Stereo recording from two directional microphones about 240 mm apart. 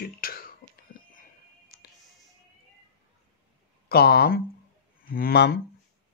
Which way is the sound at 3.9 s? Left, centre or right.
Left.